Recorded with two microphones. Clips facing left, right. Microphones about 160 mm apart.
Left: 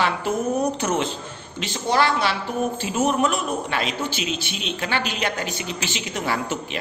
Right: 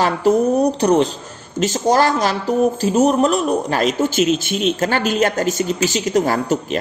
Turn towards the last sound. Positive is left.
turn(degrees=-40)  # may be behind; listen again after turning